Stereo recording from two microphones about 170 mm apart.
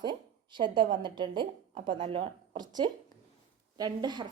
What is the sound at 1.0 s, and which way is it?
Speech, 25° right (ahead or behind).